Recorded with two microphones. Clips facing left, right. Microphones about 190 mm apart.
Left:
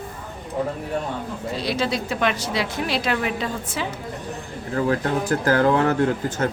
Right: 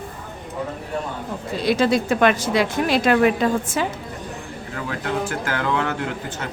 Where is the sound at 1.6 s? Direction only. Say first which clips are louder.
Right 7 dB; 50° right (ahead or behind).